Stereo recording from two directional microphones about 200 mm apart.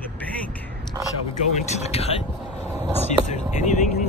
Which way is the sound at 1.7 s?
30° left (ahead or behind).